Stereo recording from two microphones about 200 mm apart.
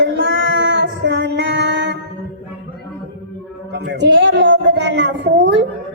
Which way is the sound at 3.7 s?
60° right (ahead or behind).